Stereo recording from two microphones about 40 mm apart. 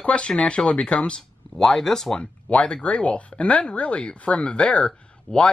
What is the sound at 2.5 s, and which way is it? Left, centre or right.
Speech, left.